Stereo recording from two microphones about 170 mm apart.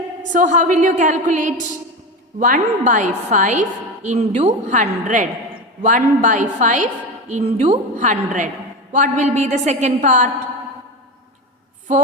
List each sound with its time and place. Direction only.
0.3 s a woman's voice: 45° right (ahead or behind)